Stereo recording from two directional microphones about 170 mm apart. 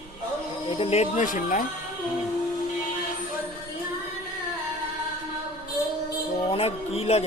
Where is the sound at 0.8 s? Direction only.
40° left (ahead or behind).